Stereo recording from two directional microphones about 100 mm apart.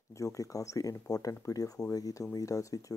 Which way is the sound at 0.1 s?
35° left (ahead or behind).